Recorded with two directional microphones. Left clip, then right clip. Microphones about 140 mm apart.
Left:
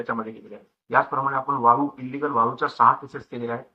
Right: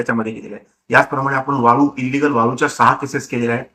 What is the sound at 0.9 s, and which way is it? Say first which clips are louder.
Speech: right 7 dB; 25° right (ahead or behind).